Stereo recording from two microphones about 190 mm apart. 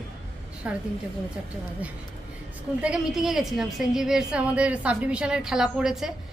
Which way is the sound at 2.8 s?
5° right (ahead or behind).